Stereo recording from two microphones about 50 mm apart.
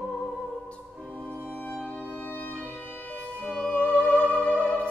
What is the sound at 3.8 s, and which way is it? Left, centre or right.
Music, left.